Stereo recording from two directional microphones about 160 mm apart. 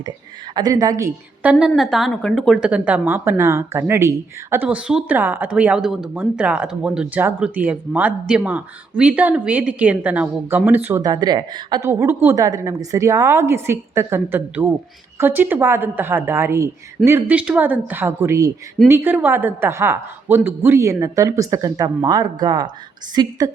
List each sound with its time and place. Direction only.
0.5 s speech: 20° right (ahead or behind)
1.4 s speech: 5° right (ahead or behind)
11.0 s speech: 25° right (ahead or behind)
11.9 s speech: 15° right (ahead or behind)